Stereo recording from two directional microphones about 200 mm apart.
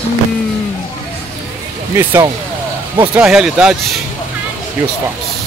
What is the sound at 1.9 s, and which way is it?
Speech, 10° right (ahead or behind).